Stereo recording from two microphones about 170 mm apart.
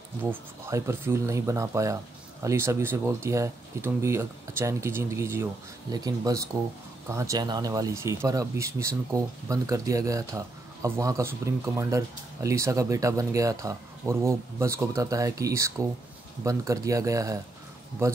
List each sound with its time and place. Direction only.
0.2 s speech: 15° right (ahead or behind)